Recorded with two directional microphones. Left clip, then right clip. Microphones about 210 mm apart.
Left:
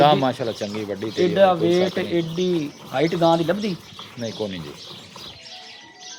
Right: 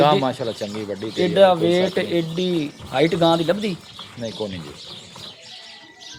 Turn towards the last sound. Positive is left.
turn(degrees=5)  # may be behind; listen again after turning